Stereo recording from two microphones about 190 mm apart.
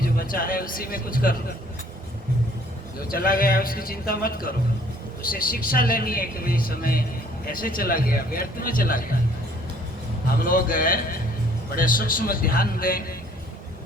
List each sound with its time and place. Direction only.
0.2 s a man's voice: 50° left (ahead or behind)
3.1 s a man's voice: 50° left (ahead or behind)
10.4 s a man's voice: 45° left (ahead or behind)